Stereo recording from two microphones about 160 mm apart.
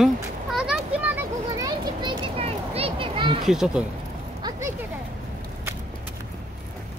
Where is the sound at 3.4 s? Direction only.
5° right (ahead or behind).